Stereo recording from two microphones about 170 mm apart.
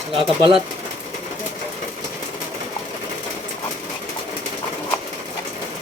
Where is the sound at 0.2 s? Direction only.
30° right (ahead or behind).